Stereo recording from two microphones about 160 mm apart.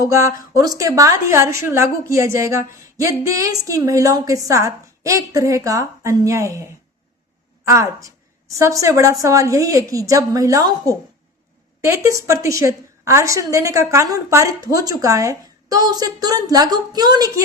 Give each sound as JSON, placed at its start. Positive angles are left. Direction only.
{"t": 0.0, "sound": "a woman's voice", "side_deg": -20}
{"t": 7.7, "sound": "a woman's voice", "side_deg": -20}